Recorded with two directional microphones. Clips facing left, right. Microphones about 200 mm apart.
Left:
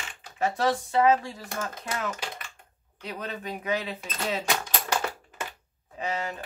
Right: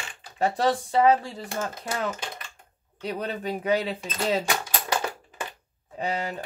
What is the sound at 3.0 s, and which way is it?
Speech, 35° right (ahead or behind).